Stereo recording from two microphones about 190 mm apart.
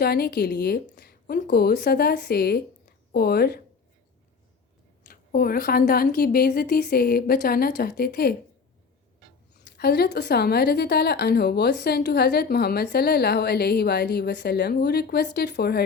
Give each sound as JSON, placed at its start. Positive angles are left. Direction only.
{"t": 0.0, "sound": "a woman's voice", "side_deg": 55}
{"t": 5.0, "sound": "a woman's voice", "side_deg": 50}
{"t": 9.6, "sound": "a woman's voice", "side_deg": 60}